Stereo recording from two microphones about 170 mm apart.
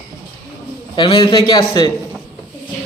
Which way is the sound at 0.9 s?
30° left (ahead or behind).